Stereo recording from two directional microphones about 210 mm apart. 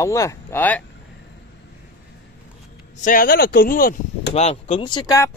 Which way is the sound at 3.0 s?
40° left (ahead or behind).